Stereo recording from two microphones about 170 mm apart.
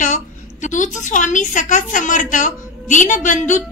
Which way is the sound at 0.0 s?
45° left (ahead or behind).